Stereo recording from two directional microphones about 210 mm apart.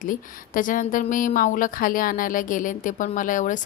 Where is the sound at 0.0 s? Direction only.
40° left (ahead or behind).